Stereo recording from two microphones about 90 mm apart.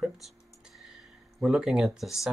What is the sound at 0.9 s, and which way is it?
Speech, 5° right (ahead or behind).